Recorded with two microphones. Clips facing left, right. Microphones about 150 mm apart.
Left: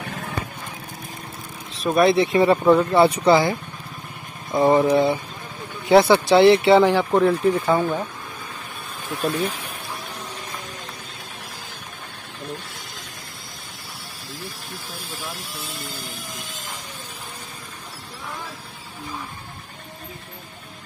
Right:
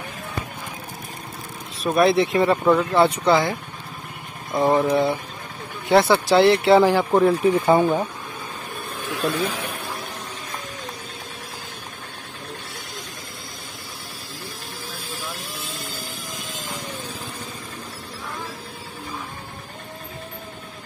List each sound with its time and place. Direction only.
1.8 s speech: centre (ahead or behind)
7.4 s speech: 20° right (ahead or behind)